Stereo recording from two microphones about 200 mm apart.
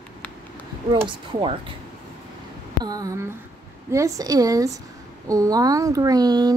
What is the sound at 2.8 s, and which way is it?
Speech, 20° right (ahead or behind).